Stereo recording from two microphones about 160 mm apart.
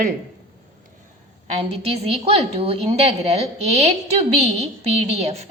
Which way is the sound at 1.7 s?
35° right (ahead or behind).